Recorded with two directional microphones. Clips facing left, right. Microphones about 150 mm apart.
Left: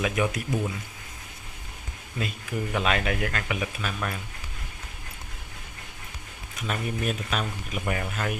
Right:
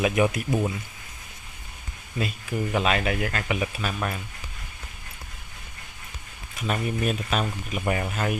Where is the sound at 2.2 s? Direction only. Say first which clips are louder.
Right 3 dB; 5° right (ahead or behind).